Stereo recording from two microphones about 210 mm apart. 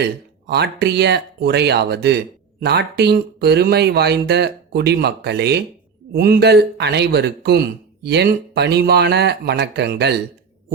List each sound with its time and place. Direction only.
0.0 s a man's voice: 50° right (ahead or behind)